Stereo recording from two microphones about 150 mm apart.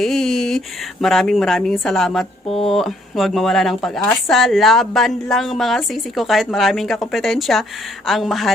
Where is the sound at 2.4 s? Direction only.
40° left (ahead or behind).